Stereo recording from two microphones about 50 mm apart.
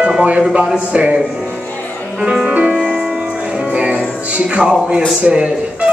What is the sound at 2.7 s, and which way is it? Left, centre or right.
Music, centre.